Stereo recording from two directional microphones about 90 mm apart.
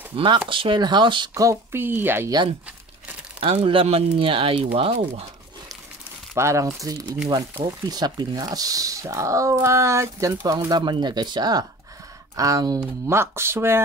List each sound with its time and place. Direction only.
0.1 s speech: 70° right (ahead or behind)
1.3 s a woman's voice: 35° right (ahead or behind)
3.3 s speech: 85° right
6.3 s speech: 35° right (ahead or behind); by 8.4 s 50° right (ahead or behind)
8.4 s speech: 40° right (ahead or behind)
10.7 s speech: 55° right (ahead or behind)
12.4 s speech: 40° right (ahead or behind)
13.1 s a woman's voice: 30° right (ahead or behind)